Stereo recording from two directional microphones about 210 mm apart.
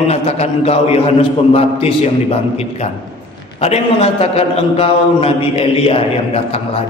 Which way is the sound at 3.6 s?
30° left (ahead or behind).